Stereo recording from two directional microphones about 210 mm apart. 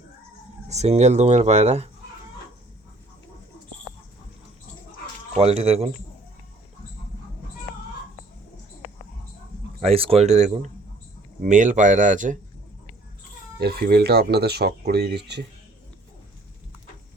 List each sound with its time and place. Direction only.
0.7 s speech: 30° right (ahead or behind)
5.3 s speech: 30° right (ahead or behind)
9.8 s speech: 25° right (ahead or behind)
13.6 s speech: 50° right (ahead or behind)